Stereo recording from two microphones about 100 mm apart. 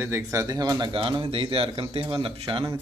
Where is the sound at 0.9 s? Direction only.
60° right (ahead or behind).